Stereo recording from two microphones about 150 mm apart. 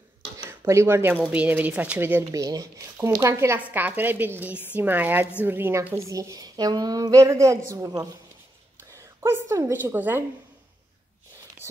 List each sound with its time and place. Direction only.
0.5 s a woman's voice: 15° right (ahead or behind)